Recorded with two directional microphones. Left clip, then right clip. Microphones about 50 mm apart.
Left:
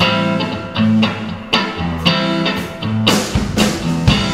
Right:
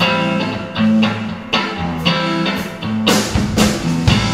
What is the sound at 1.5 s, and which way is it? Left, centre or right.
Music, left.